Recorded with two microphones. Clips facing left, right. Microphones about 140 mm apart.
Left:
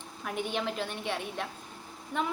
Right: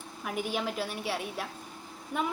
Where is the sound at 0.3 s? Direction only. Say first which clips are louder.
Even; 5° right (ahead or behind).